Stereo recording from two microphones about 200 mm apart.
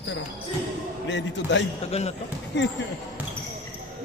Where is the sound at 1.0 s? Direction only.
65° left (ahead or behind).